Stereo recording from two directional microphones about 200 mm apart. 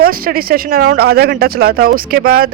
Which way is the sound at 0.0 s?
45° right (ahead or behind).